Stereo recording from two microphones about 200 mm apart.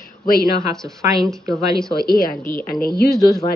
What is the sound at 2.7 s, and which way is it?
Speech, 50° left (ahead or behind).